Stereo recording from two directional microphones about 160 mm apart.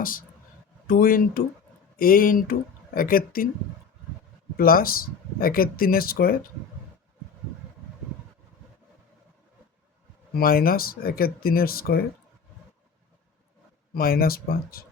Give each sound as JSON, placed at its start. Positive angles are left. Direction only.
{"t": 0.0, "sound": "speech", "side_deg": 60}
{"t": 4.5, "sound": "speech", "side_deg": 65}
{"t": 10.3, "sound": "speech", "side_deg": 65}
{"t": 13.9, "sound": "speech", "side_deg": 65}